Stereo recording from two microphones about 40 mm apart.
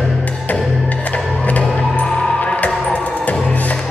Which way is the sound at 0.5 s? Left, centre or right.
Left.